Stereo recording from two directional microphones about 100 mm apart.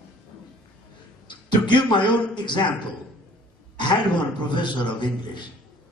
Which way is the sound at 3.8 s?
50° left (ahead or behind).